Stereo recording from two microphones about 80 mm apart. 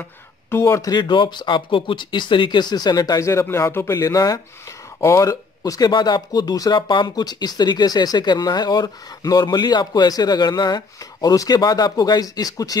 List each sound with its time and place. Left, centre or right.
0.5 s speech: left
0.8 s speech: left
3.2 s speech: left
5.0 s speech: left
5.3 s speech: left
5.9 s speech: left
6.9 s speech: left